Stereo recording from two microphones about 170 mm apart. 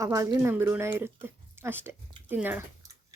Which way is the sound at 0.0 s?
20° right (ahead or behind).